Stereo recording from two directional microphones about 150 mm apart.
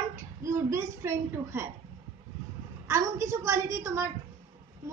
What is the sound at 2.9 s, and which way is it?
A woman's voice, 20° right (ahead or behind).